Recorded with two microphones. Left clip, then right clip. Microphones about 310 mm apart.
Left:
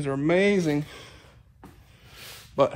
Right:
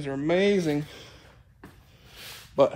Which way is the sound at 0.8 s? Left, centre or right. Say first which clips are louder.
Left 1 dB; left.